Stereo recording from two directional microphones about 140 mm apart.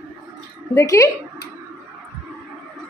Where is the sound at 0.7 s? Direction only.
20° left (ahead or behind).